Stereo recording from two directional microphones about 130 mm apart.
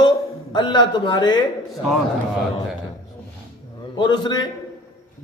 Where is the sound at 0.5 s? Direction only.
35° left (ahead or behind).